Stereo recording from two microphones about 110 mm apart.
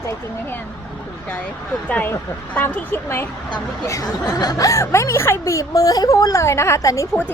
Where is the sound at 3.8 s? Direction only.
30° left (ahead or behind).